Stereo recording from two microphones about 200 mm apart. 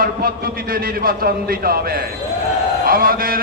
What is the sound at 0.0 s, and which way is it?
A man's voice, 45° right (ahead or behind).